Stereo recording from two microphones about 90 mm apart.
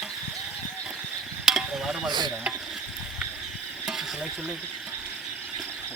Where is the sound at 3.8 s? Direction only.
5° right (ahead or behind).